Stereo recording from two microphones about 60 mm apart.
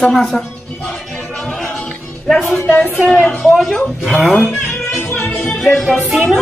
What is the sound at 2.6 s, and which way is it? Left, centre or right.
Speech, left.